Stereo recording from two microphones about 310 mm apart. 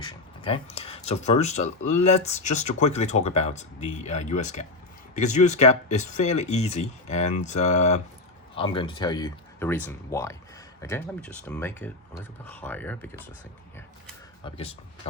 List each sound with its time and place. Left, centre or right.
0.0 s speech: centre
14.4 s speech: centre